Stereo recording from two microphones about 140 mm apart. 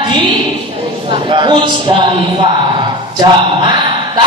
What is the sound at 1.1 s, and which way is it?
A man's voice, 35° right (ahead or behind).